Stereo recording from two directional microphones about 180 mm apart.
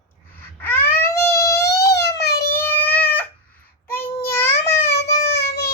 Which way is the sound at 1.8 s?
65° left (ahead or behind).